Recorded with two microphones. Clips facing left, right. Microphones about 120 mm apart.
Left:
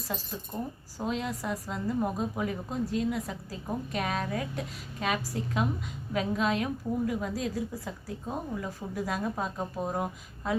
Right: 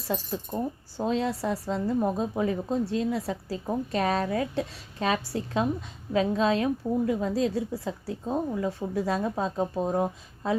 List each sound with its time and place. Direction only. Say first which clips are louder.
0.1 s a woman's voice: right 7 dB; 30° right (ahead or behind)